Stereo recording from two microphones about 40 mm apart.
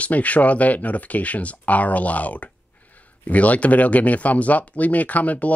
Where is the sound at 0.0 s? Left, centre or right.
Left.